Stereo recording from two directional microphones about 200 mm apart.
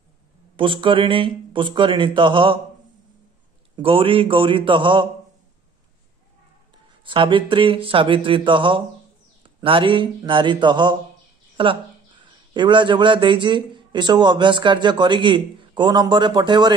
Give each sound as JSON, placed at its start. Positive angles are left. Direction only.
{"t": 0.6, "sound": "speech", "side_deg": -25}
{"t": 3.7, "sound": "speech", "side_deg": -25}
{"t": 7.1, "sound": "a man's voice", "side_deg": -25}